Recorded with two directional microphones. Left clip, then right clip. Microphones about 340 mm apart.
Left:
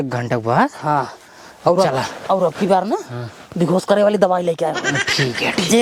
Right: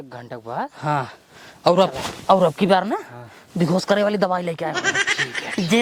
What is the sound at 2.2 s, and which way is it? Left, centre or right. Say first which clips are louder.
Speech: right 2 dB; right.